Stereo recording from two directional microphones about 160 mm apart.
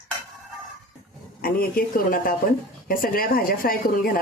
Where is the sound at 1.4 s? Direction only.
65° left (ahead or behind).